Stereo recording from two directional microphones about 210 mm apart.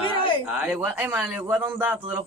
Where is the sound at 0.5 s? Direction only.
5° right (ahead or behind).